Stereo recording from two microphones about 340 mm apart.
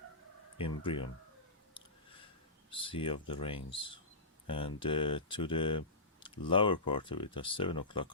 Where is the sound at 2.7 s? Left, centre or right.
Centre.